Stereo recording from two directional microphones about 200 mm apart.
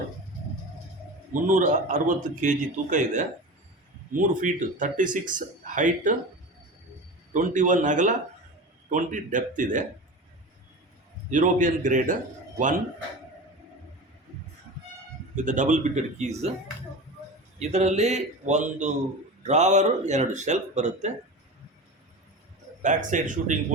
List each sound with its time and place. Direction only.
1.3 s speech: 40° right (ahead or behind)
7.3 s speech: 40° right (ahead or behind)
11.3 s speech: 40° right (ahead or behind)
15.4 s speech: 40° right (ahead or behind)
17.6 s speech: 35° right (ahead or behind)
22.8 s speech: 40° right (ahead or behind)